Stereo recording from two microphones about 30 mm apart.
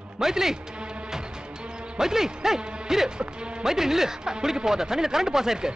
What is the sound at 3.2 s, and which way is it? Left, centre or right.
Speech, right.